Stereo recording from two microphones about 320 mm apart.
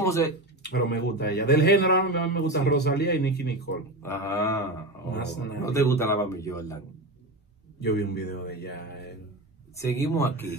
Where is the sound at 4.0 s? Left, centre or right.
Centre.